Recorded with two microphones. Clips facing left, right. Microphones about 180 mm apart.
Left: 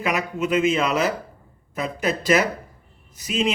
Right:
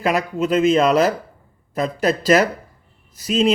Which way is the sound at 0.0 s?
35° right (ahead or behind).